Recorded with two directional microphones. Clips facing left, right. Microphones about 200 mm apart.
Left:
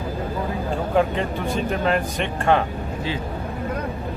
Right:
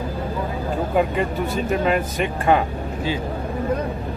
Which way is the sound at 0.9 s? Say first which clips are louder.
Even; 5° right (ahead or behind).